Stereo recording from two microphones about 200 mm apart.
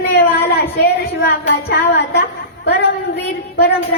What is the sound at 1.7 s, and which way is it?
Speech, 55° left (ahead or behind).